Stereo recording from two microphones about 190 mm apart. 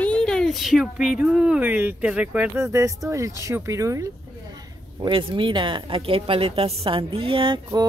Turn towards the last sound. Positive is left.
turn(degrees=-25)  # may be behind; listen again after turning